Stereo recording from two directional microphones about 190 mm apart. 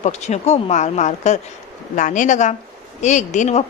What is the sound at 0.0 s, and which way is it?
A woman's voice, 35° left (ahead or behind).